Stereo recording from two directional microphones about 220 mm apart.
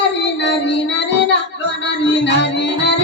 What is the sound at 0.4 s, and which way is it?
Child singing, 55° left (ahead or behind).